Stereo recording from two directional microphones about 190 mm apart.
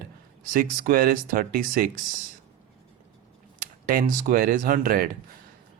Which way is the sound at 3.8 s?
45° right (ahead or behind).